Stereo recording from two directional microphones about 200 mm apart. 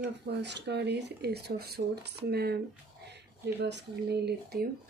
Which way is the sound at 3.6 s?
60° right (ahead or behind).